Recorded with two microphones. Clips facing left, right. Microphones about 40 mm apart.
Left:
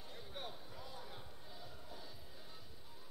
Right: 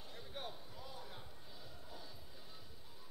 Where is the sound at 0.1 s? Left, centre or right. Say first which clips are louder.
Right 1 dB; centre.